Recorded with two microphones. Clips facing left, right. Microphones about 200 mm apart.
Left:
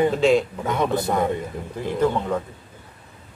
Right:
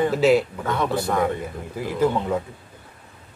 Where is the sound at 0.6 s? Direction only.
20° left (ahead or behind).